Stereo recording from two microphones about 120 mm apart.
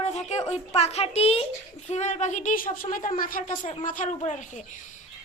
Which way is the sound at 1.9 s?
75° left (ahead or behind).